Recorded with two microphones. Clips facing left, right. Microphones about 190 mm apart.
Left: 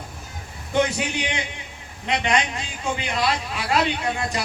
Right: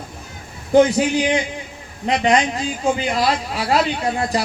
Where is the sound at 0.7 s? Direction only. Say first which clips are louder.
Right 9 dB; 35° right (ahead or behind).